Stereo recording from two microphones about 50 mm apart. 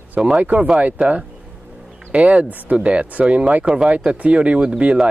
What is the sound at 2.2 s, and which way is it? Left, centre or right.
Speech, right.